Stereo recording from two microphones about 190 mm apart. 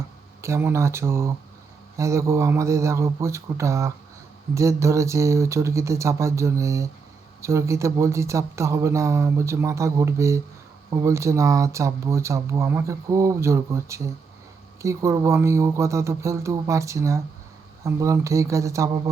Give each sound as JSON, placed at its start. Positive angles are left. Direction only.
{"t": 0.4, "sound": "speech", "side_deg": -15}